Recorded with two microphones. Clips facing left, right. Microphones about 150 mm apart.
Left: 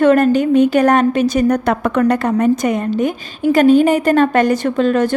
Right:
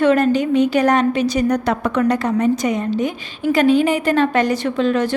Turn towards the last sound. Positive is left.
turn(degrees=50)  # may be behind; listen again after turning